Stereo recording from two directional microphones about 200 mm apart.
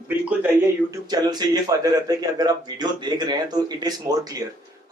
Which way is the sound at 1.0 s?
20° right (ahead or behind).